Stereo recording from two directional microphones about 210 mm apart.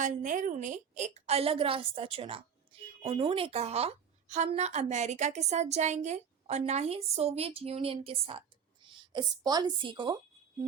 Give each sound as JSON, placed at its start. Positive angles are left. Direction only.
{"t": 0.0, "sound": "a woman's voice", "side_deg": -40}